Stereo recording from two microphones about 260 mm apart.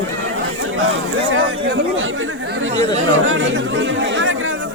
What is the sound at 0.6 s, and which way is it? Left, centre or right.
Speech, right.